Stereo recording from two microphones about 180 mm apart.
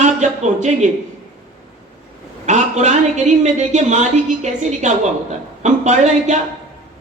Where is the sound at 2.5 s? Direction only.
40° right (ahead or behind).